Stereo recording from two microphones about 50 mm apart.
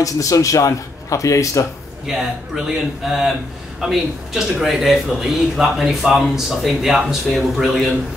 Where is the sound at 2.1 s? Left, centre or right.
Centre.